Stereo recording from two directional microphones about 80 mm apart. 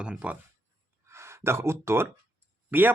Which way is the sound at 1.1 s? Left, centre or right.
Right.